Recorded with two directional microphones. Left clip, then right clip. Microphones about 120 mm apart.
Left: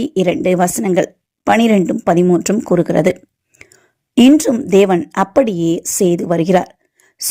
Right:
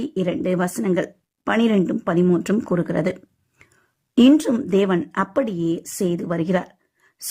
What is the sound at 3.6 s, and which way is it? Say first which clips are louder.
Clicking: left 11 dB; 25° left (ahead or behind).